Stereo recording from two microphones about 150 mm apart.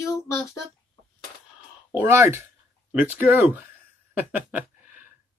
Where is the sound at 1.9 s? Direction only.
15° right (ahead or behind).